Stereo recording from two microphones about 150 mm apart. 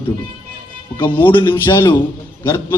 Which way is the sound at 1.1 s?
35° left (ahead or behind).